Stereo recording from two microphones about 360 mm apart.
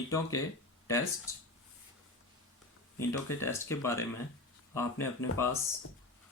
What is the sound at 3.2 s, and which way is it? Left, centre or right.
Speech, centre.